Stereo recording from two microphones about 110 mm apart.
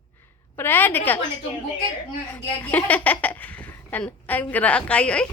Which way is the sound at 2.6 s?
15° left (ahead or behind).